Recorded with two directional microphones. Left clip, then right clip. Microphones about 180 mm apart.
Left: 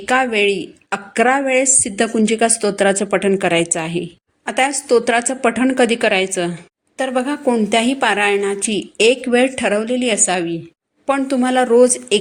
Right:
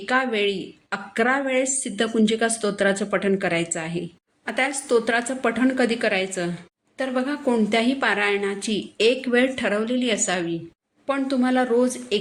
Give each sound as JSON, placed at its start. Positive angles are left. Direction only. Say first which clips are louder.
{"t": 0.0, "sound": "a woman's voice", "louder": "left 7 dB", "side_deg": 35}